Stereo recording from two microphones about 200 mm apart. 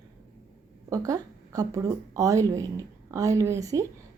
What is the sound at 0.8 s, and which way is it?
Speech, 15° right (ahead or behind).